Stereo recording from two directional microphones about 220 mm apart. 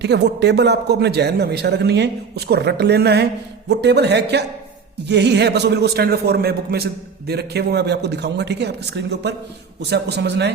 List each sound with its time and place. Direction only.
0.0 s a man's voice: 50° right (ahead or behind)